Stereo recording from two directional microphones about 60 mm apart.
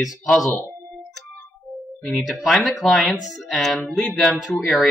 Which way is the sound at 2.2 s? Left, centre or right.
Centre.